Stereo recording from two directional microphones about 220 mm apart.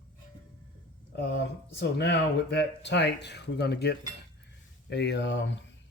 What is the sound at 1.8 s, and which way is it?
Speech, 50° left (ahead or behind).